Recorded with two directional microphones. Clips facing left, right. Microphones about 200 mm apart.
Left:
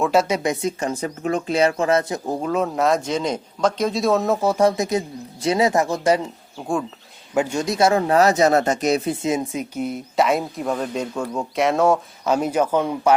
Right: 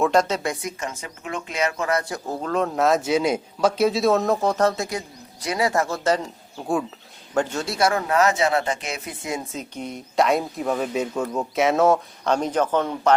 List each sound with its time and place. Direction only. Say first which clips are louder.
0.0 s speech: left 1 dB; 5° left (ahead or behind)
0.5 s speech: left 7 dB; 30° left (ahead or behind); by 6.2 s 15° left (ahead or behind)
6.6 s speech: even; centre (ahead or behind)
7.3 s speech: left 3 dB; 10° left (ahead or behind); by 9.1 s 40° left (ahead or behind)
9.2 s speech: left 7 dB; 20° left (ahead or behind)